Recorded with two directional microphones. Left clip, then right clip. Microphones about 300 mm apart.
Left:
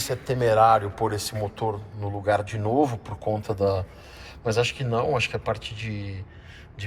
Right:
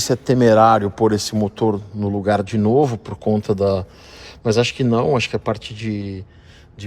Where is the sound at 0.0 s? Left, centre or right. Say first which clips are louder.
Right 9 dB; right.